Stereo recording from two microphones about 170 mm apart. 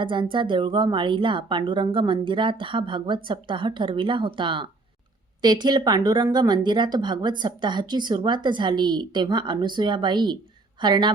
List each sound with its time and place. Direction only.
0.0 s a woman's voice: 30° right (ahead or behind)